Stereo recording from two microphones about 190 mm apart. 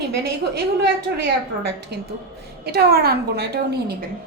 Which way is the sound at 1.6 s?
60° right (ahead or behind).